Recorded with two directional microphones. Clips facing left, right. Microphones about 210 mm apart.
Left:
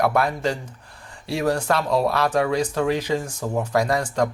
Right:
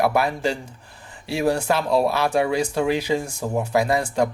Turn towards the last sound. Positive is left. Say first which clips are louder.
# right 1 dB
turn(degrees=-10)  # may be behind; listen again after turning